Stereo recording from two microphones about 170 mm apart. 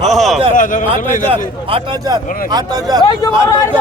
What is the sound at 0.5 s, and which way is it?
Speech, 50° left (ahead or behind).